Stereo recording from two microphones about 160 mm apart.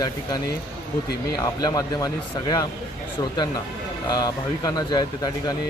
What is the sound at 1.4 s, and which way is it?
Speech, 25° left (ahead or behind).